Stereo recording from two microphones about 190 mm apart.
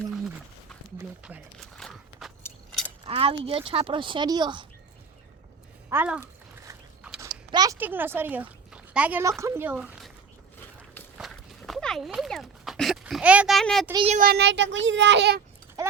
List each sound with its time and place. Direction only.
1.2 s walk: centre (ahead or behind)
3.0 s speech: 30° right (ahead or behind)
5.9 s speech: 10° right (ahead or behind)
7.2 s a sound: 20° right (ahead or behind)
7.8 s speech: 10° right (ahead or behind)
11.2 s walk: centre (ahead or behind)
13.9 s a child's voice: 30° right (ahead or behind)
14.2 s a child's voice: 55° right (ahead or behind)
15.8 s a sound: 15° right (ahead or behind)